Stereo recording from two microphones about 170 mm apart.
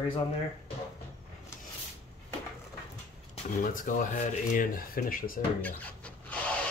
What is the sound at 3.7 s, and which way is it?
Speech, 50° left (ahead or behind).